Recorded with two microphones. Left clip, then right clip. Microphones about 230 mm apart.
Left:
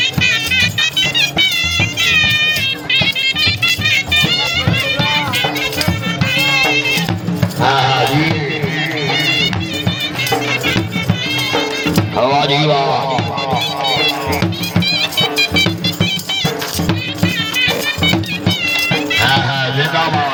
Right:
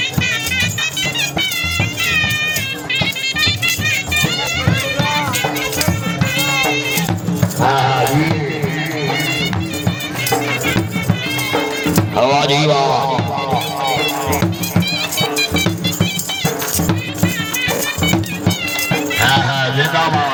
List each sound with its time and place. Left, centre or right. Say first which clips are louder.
0.0 s music: left 4 dB; centre
7.9 s music: left 1 dB; left
9.1 s music: left 4 dB; centre
12.1 s music: even; centre
12.6 s a sound: even; right
13.8 s music: left 3 dB; centre
19.2 s run: right 2 dB; centre